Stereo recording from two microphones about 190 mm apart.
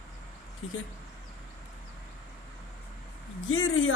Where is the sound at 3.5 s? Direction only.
90° left.